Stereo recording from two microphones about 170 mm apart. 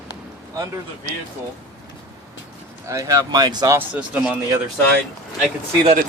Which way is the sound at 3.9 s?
5° right (ahead or behind).